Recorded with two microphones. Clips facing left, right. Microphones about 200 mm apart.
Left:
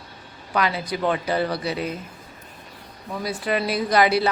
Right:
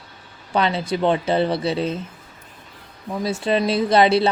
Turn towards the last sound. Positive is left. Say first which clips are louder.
# right 3 dB
turn(degrees=-25)  # may be behind; listen again after turning